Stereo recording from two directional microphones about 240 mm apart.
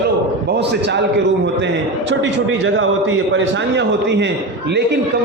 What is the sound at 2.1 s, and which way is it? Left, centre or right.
A man's voice, right.